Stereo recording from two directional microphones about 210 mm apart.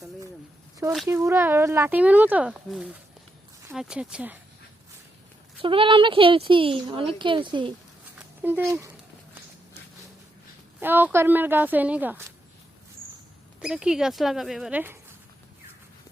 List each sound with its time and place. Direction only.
1.0 s speech: 10° right (ahead or behind)
5.5 s a woman's voice: 25° right (ahead or behind)
8.4 s speech: 10° right (ahead or behind)
10.8 s speech: 10° right (ahead or behind)
13.6 s speech: 5° right (ahead or behind)